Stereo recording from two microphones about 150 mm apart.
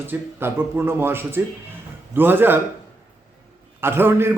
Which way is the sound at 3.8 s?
15° right (ahead or behind).